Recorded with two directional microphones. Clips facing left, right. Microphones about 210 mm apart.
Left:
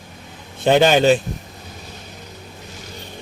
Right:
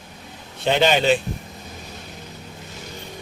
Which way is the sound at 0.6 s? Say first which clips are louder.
Left 5 dB; 50° left (ahead or behind).